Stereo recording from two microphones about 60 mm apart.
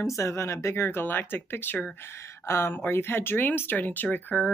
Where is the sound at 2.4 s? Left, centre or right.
Left.